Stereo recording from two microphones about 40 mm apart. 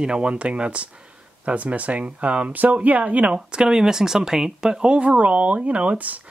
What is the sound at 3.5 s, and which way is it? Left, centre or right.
Speech, right.